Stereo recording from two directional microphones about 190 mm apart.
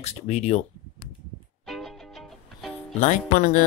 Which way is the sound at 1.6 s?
Centre (ahead or behind).